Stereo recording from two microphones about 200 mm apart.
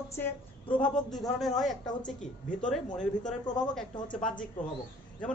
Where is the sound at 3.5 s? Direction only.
20° left (ahead or behind).